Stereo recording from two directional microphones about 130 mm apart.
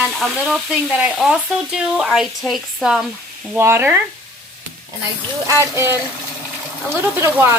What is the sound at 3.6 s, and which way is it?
Speech, 20° right (ahead or behind).